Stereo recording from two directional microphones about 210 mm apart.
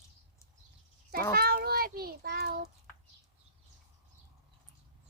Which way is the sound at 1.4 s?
50° right (ahead or behind).